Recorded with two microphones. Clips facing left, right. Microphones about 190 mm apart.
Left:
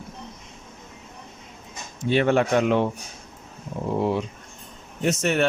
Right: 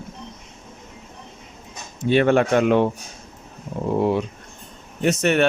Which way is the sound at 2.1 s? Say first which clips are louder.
Right 3 dB; 55° right (ahead or behind).